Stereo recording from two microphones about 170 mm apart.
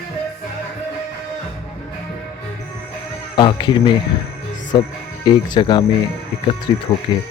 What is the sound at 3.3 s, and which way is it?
Speech, 25° left (ahead or behind).